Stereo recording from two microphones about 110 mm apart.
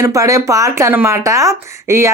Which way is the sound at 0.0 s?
30° right (ahead or behind).